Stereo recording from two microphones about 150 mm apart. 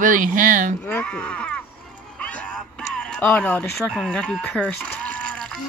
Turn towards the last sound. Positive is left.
turn(degrees=5)  # may be behind; listen again after turning